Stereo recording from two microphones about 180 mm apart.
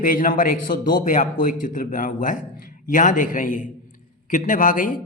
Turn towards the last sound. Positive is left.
turn(degrees=50)  # may be behind; listen again after turning